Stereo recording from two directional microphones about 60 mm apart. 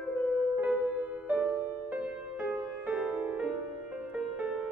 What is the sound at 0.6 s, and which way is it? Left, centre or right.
Music, right.